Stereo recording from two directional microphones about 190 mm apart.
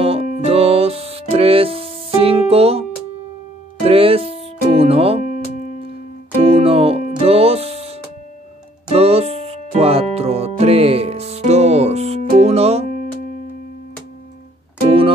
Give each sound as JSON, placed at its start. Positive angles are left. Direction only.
{"t": 0.0, "sound": "music", "side_deg": -30}
{"t": 3.8, "sound": "speech", "side_deg": -30}
{"t": 4.6, "sound": "music", "side_deg": -30}
{"t": 8.9, "sound": "music", "side_deg": -30}
{"t": 14.9, "sound": "music", "side_deg": -30}